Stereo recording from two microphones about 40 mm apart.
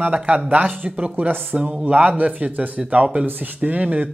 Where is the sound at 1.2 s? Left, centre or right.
Right.